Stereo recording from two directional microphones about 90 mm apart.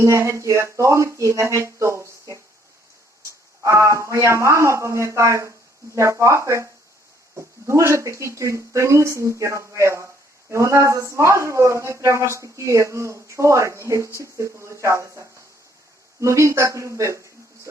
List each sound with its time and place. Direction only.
0.0 s speech: 35° right (ahead or behind)
3.6 s speech: 35° right (ahead or behind)
7.7 s speech: 30° right (ahead or behind)